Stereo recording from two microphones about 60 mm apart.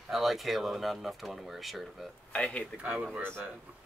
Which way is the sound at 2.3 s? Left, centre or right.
Centre.